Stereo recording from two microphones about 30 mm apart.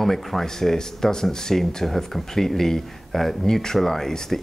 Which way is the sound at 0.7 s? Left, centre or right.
Left.